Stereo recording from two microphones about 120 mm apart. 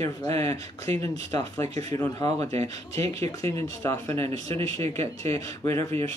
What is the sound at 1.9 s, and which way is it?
Speech, 30° left (ahead or behind).